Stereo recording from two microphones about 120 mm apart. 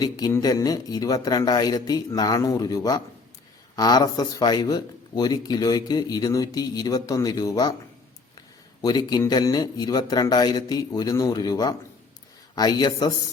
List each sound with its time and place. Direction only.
0.0 s speech: 30° left (ahead or behind)
8.8 s speech: 35° left (ahead or behind)